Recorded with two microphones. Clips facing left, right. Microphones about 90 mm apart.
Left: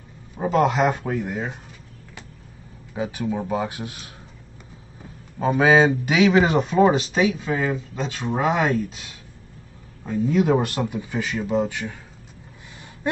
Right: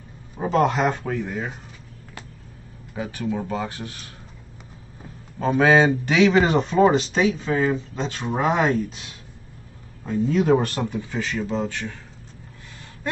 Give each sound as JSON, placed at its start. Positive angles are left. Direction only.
{"t": 0.4, "sound": "speech", "side_deg": 5}
{"t": 2.9, "sound": "speech", "side_deg": 15}
{"t": 5.4, "sound": "speech", "side_deg": 5}
{"t": 10.0, "sound": "speech", "side_deg": 5}
{"t": 13.0, "sound": "a sound", "side_deg": 20}